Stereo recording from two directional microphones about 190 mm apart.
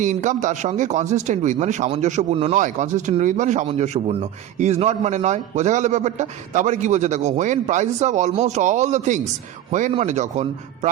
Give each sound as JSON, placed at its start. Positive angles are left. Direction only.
{"t": 0.0, "sound": "speech", "side_deg": -40}